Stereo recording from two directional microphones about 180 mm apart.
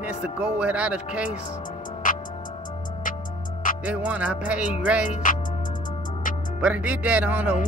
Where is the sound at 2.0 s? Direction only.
45° left (ahead or behind).